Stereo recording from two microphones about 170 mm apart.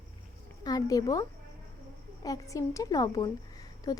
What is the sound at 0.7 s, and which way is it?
Speech, 20° left (ahead or behind).